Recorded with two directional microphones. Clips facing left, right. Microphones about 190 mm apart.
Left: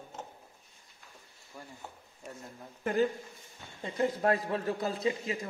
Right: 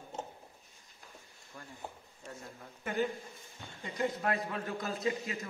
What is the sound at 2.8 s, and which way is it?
A man's voice, 35° left (ahead or behind).